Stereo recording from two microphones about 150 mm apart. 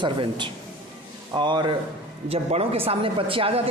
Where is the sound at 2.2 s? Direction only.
40° right (ahead or behind).